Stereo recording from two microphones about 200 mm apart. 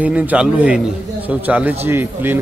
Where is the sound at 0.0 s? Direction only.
5° right (ahead or behind).